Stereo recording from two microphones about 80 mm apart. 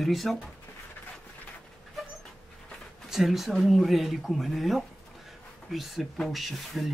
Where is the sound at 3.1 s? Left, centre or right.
Centre.